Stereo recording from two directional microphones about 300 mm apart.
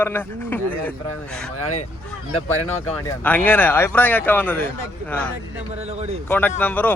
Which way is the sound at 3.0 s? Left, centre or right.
Centre.